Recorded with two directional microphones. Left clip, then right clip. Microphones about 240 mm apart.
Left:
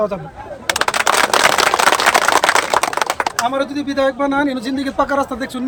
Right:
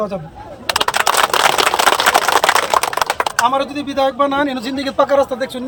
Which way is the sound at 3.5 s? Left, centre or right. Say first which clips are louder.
Right 2 dB; centre.